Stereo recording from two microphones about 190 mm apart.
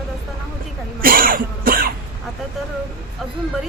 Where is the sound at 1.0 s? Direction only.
50° right (ahead or behind).